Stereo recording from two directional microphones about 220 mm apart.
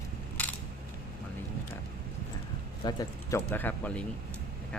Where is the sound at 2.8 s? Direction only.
20° left (ahead or behind).